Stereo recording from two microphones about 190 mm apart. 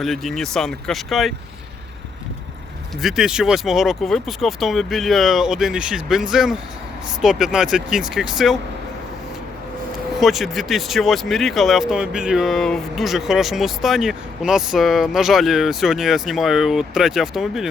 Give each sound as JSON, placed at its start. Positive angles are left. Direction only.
{"t": 0.0, "sound": "speech", "side_deg": 0}
{"t": 3.0, "sound": "speech", "side_deg": 0}
{"t": 10.2, "sound": "speech", "side_deg": 0}